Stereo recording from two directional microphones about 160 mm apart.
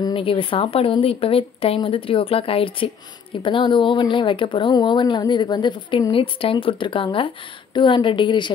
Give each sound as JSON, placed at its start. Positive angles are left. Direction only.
{"t": 0.0, "sound": "speech", "side_deg": 35}